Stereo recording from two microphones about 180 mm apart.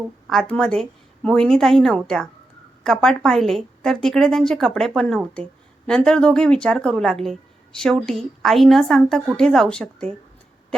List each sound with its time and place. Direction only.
0.3 s a woman's voice: 5° left (ahead or behind)